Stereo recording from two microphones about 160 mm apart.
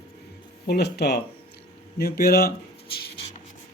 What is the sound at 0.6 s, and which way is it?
Speech, 90° left.